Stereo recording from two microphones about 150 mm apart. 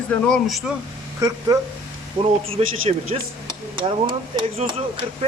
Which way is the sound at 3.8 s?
35° right (ahead or behind).